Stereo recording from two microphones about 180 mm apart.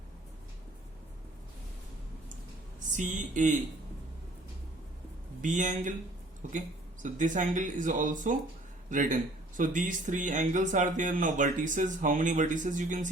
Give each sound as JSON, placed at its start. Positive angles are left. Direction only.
{"t": 2.9, "sound": "speech", "side_deg": -45}
{"t": 5.4, "sound": "speech", "side_deg": -45}